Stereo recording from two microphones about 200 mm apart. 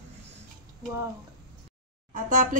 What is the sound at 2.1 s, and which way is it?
Speech, 40° right (ahead or behind).